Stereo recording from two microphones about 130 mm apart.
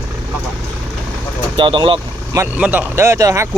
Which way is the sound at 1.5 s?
40° right (ahead or behind).